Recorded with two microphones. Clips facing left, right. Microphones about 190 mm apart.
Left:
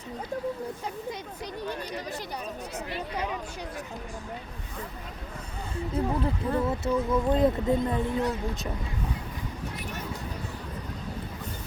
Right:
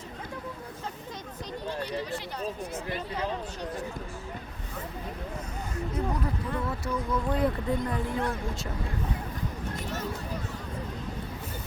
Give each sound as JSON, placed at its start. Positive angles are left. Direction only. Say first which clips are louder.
{"t": 5.7, "sound": "speech", "louder": "left 3 dB", "side_deg": 30}